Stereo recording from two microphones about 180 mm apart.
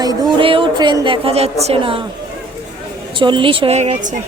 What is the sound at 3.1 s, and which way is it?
A woman's voice, 25° right (ahead or behind).